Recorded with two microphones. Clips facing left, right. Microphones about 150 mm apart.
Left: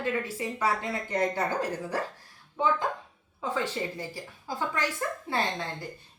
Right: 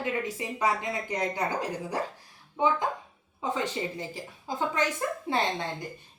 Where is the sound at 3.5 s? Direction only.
20° right (ahead or behind).